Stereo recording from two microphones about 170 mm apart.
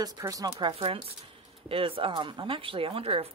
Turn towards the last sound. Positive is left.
turn(degrees=-35)  # may be behind; listen again after turning